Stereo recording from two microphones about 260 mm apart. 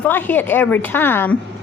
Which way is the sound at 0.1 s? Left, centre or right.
Centre.